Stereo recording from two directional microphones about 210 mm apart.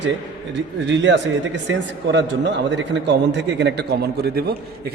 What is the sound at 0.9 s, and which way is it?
A man's voice, 60° right (ahead or behind).